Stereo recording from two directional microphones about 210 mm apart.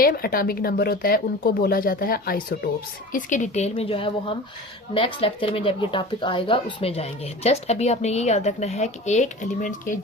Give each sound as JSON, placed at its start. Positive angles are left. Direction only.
{"t": 0.0, "sound": "speech", "side_deg": 45}